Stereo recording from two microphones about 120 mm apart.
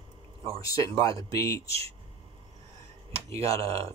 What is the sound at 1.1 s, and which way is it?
Speech, 25° left (ahead or behind).